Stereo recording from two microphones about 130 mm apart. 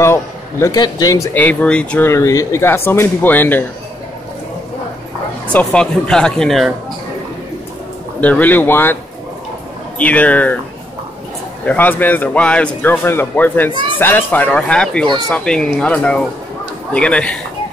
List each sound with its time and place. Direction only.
0.0 s a man's voice: 20° left (ahead or behind)
0.7 s speech: 30° left (ahead or behind)
1.4 s speech: 10° left (ahead or behind)
2.0 s speech: 25° left (ahead or behind)
5.5 s speech: 10° left (ahead or behind)
8.2 s speech: 10° left (ahead or behind)
9.9 s speech: 10° left (ahead or behind)
11.6 s speech: 10° left (ahead or behind)